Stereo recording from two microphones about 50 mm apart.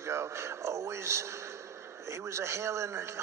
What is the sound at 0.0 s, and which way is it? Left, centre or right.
A man's voice, right.